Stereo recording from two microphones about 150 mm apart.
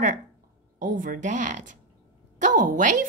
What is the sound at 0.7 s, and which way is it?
Speech, 60° right (ahead or behind).